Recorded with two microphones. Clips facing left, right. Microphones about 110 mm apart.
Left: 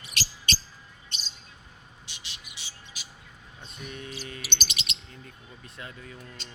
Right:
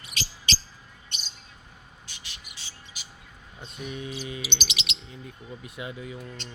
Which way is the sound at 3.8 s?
10° right (ahead or behind).